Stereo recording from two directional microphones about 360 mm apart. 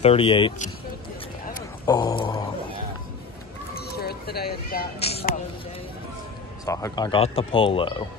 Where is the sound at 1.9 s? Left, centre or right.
Centre.